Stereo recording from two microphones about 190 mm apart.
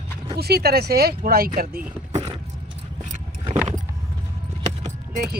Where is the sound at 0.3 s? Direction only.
55° right (ahead or behind).